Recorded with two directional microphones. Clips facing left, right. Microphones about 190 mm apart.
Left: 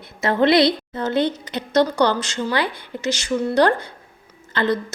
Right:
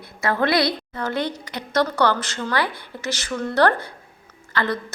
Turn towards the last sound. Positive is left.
turn(degrees=25)  # may be behind; listen again after turning